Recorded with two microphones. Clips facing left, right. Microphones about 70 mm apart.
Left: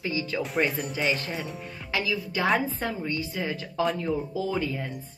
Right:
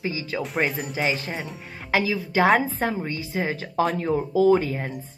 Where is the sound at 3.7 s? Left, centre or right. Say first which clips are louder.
Right 4 dB; right.